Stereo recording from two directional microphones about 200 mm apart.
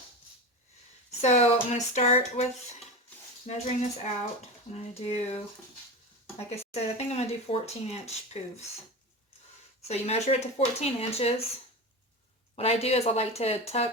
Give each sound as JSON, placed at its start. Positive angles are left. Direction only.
{"t": 1.2, "sound": "speech", "side_deg": 35}
{"t": 9.8, "sound": "speech", "side_deg": 35}
{"t": 12.5, "sound": "speech", "side_deg": 30}